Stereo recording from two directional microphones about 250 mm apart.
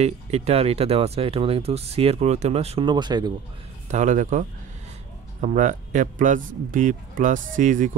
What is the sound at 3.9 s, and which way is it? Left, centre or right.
Speech, right.